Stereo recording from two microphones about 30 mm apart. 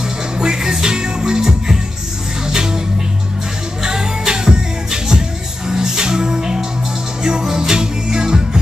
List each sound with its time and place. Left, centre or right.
0.7 s music: right
3.8 s music: right